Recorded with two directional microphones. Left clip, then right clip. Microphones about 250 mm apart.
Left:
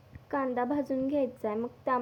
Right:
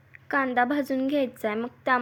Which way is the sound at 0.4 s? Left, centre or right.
Right.